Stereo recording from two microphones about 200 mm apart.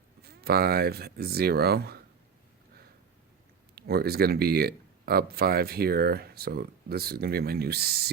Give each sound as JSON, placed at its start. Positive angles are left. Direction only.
{"t": 0.2, "sound": "speech", "side_deg": -50}
{"t": 3.8, "sound": "speech", "side_deg": -50}